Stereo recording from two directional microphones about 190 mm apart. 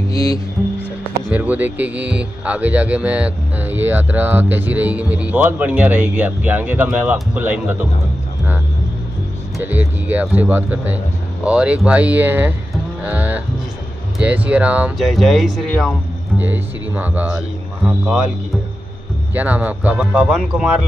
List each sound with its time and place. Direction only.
0.1 s speech: 15° left (ahead or behind)
1.1 s speech: 10° right (ahead or behind)
9.6 s speech: 10° right (ahead or behind)
12.7 s music: 10° right (ahead or behind)
14.1 s speech: 5° right (ahead or behind)
16.3 s speech: 10° right (ahead or behind)
19.3 s speech: 10° right (ahead or behind)